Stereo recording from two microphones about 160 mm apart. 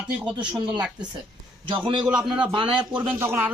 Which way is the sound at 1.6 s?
30° right (ahead or behind).